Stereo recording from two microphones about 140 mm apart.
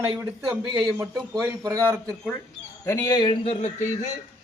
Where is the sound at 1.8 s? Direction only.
5° left (ahead or behind).